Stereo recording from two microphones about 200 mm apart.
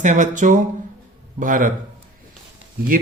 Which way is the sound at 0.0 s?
40° right (ahead or behind).